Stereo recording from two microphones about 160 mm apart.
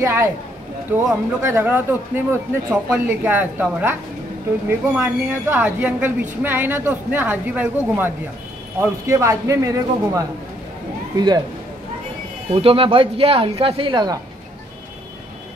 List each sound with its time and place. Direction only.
0.0 s speech: 15° right (ahead or behind)
4.6 s a man's voice: 15° right (ahead or behind)
12.5 s speech: 35° right (ahead or behind)